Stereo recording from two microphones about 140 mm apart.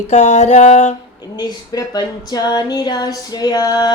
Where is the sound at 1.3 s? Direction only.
30° left (ahead or behind).